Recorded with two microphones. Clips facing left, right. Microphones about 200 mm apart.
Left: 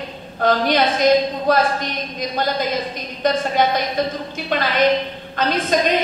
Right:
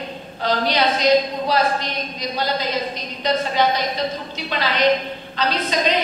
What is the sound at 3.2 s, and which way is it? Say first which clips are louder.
A woman's voice: left 2 dB; 50° left (ahead or behind).